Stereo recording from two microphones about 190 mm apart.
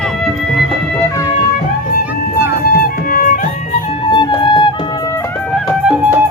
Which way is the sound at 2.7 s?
50° left (ahead or behind).